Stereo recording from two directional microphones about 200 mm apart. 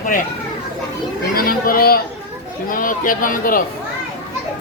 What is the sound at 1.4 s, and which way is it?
Speech, 45° left (ahead or behind).